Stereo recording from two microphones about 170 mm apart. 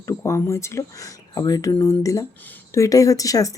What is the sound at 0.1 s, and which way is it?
Speech, 15° left (ahead or behind).